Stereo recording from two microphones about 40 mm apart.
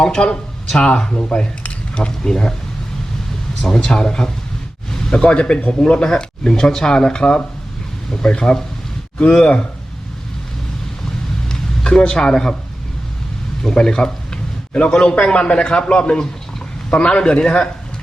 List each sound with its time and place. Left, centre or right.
0.0 s speech: left
3.6 s speech: centre
5.3 s speech: left
5.9 s speech: left
11.4 s vehicle: centre
12.1 s speech: centre
13.6 s speech: centre